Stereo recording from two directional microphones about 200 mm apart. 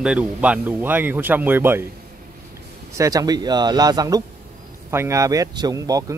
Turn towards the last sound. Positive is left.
turn(degrees=-15)  # may be behind; listen again after turning